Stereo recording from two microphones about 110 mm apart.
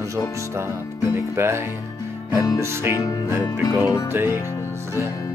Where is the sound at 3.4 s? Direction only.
30° left (ahead or behind).